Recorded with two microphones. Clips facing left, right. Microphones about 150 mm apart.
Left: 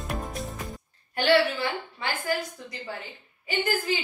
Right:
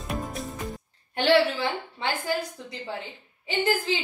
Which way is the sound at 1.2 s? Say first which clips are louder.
Right 1 dB; 25° right (ahead or behind).